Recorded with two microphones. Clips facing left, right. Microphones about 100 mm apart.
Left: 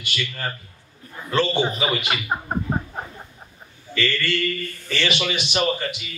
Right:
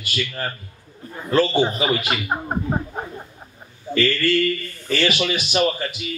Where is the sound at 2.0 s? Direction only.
10° right (ahead or behind).